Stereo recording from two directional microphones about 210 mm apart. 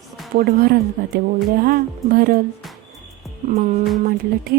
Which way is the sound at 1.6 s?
45° right (ahead or behind).